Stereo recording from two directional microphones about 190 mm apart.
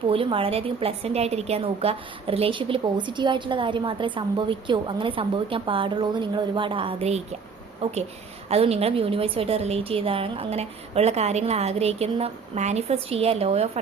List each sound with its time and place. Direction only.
0.1 s a woman's voice: 30° right (ahead or behind)